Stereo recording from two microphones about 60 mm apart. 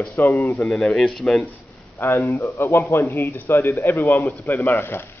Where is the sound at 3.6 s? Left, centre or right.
Left.